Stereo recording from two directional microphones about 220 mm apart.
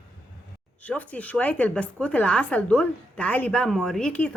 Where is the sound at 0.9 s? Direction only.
5° left (ahead or behind).